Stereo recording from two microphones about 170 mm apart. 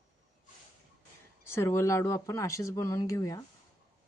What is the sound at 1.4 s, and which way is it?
Speech, 15° left (ahead or behind).